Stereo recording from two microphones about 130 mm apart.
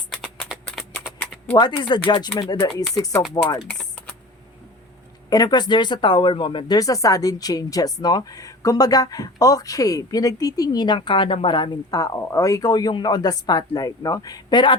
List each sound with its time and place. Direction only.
0.1 s a sound: centre (ahead or behind)
1.5 s speech: 35° left (ahead or behind)
3.7 s typing: 5° left (ahead or behind)
5.3 s speech: 30° left (ahead or behind)
6.7 s speech: 25° left (ahead or behind)